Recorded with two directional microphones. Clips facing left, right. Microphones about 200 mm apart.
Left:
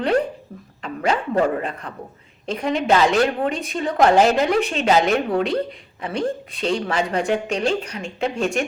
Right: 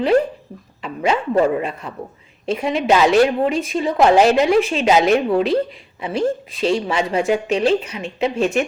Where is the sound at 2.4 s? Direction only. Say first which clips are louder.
Right 2 dB; 5° right (ahead or behind).